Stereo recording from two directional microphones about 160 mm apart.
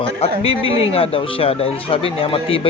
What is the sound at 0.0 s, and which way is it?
Speech, 35° left (ahead or behind).